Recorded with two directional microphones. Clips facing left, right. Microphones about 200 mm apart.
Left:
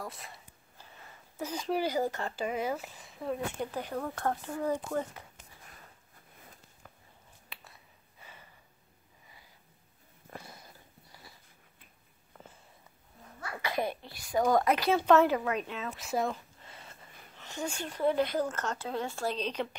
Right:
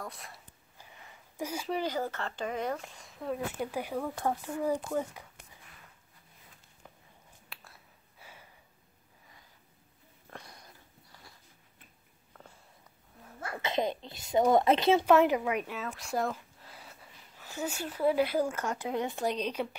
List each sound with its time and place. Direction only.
0.0 s speech: centre (ahead or behind)
1.4 s speech: 10° right (ahead or behind)
1.7 s speech: 10° left (ahead or behind); by 4.7 s 10° right (ahead or behind)
7.4 s a sound: centre (ahead or behind)
10.3 s a sound: 5° left (ahead or behind)
13.6 s a child's voice: 20° right (ahead or behind)
15.0 s speech: 15° right (ahead or behind)
15.9 s a sound: centre (ahead or behind)
17.4 s speech: 5° right (ahead or behind)